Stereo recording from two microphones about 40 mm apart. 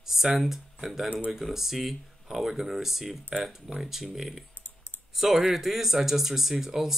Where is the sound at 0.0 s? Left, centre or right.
Centre.